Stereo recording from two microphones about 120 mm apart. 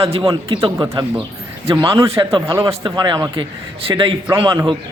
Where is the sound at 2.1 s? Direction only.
45° right (ahead or behind).